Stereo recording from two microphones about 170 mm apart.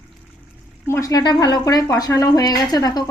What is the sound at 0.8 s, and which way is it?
A woman's voice, 15° left (ahead or behind).